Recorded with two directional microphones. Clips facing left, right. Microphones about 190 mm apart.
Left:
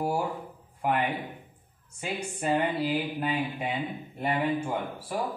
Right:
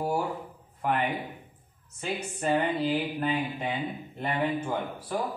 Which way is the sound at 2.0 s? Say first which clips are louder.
Even; 10° left (ahead or behind).